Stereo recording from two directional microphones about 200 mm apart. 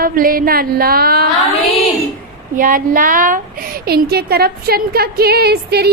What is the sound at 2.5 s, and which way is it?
Speech, 45° right (ahead or behind).